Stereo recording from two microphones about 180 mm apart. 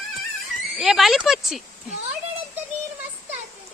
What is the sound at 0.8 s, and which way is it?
Speech, centre (ahead or behind).